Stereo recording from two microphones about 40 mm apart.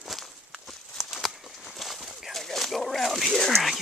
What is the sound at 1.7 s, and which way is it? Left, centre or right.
Clip-clop, centre.